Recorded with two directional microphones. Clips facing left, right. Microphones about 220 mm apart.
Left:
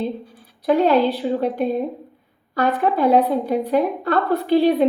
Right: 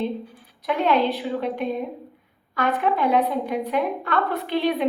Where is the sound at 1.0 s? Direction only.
Centre (ahead or behind).